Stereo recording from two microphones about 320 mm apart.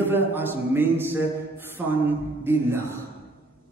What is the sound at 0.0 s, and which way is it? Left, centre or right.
A man's voice, centre.